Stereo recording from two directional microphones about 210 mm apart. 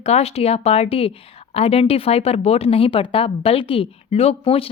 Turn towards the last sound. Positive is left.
turn(degrees=25)  # may be behind; listen again after turning